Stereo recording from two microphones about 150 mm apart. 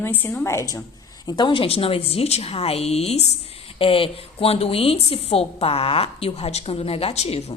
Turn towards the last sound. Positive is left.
turn(degrees=45)  # may be behind; listen again after turning